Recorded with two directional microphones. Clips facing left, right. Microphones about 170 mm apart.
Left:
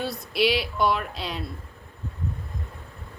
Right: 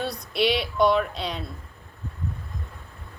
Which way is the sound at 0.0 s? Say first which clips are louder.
Even; centre (ahead or behind).